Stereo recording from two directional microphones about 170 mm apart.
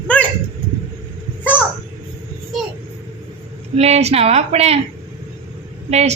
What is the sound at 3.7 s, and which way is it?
A woman's voice, 40° right (ahead or behind).